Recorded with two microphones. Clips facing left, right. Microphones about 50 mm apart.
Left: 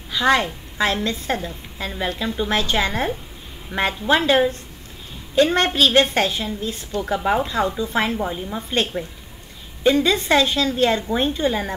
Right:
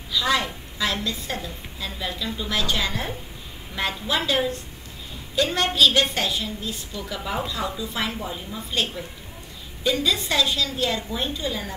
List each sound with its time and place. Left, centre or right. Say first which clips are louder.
0.1 s a woman's voice: left 5 dB; left